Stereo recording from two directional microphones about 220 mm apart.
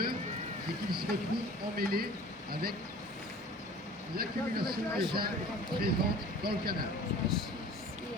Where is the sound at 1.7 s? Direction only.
40° right (ahead or behind).